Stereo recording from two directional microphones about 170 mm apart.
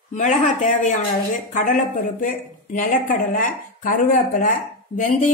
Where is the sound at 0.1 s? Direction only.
45° left (ahead or behind).